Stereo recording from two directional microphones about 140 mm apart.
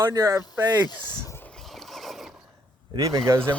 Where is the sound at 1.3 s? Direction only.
15° left (ahead or behind).